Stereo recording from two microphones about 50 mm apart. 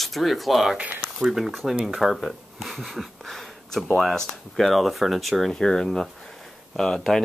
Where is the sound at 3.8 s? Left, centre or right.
Centre.